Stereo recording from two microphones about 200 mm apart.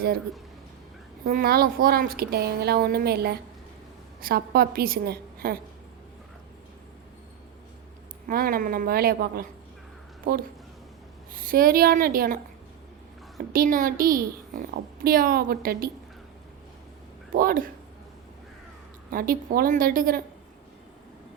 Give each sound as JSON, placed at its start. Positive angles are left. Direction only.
{"t": 1.2, "sound": "a woman's voice", "side_deg": -45}
{"t": 8.3, "sound": "speech", "side_deg": -45}
{"t": 11.3, "sound": "a woman's voice", "side_deg": -45}
{"t": 13.5, "sound": "speech", "side_deg": -45}
{"t": 17.3, "sound": "speech", "side_deg": -45}
{"t": 19.1, "sound": "speech", "side_deg": -45}